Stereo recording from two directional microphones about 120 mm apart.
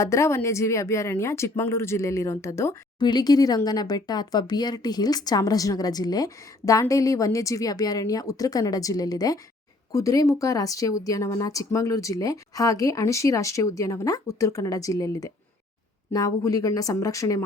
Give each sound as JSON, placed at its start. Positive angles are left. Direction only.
{"t": 0.0, "sound": "speech", "side_deg": 25}
{"t": 3.0, "sound": "speech", "side_deg": 35}